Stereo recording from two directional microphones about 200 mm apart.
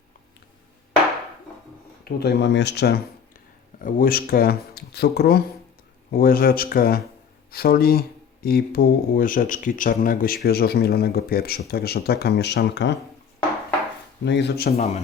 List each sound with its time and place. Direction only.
2.0 s speech: 55° left (ahead or behind)
14.3 s speech: 60° left (ahead or behind)
14.7 s a man's voice: 30° left (ahead or behind)